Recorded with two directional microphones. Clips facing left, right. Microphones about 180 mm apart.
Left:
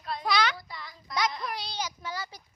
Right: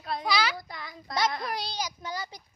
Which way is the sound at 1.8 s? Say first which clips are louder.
Right 1 dB; 15° right (ahead or behind).